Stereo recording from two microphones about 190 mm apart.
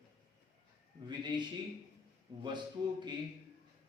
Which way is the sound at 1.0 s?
25° right (ahead or behind).